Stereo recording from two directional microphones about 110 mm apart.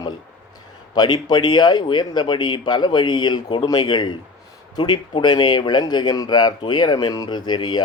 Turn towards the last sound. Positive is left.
turn(degrees=45)  # may be behind; listen again after turning